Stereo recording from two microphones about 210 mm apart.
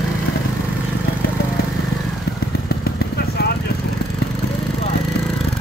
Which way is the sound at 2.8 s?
50° left (ahead or behind).